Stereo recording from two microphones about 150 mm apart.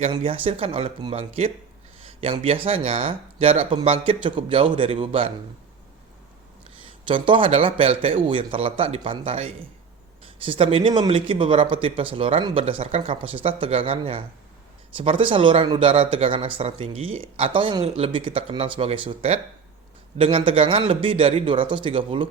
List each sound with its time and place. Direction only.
0.1 s speech: 35° right (ahead or behind)
2.0 s a sound: 40° right (ahead or behind)
2.6 s speech: 40° right (ahead or behind)
7.1 s speech: 35° right (ahead or behind)